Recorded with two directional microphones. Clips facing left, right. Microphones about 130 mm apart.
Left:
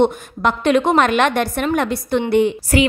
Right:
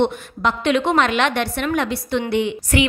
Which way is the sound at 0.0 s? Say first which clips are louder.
Left 3 dB; 50° left (ahead or behind).